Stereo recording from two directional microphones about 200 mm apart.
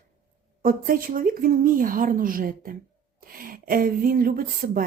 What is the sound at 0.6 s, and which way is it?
Speech, 45° right (ahead or behind).